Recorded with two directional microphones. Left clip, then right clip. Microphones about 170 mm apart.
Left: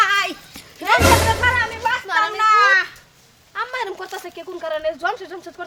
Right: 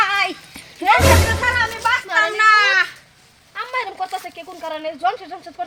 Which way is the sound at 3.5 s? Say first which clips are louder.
Even; 20° left (ahead or behind).